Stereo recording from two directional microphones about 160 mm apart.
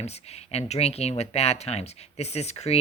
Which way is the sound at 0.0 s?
40° left (ahead or behind).